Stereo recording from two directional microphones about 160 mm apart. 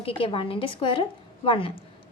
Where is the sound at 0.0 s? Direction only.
35° left (ahead or behind).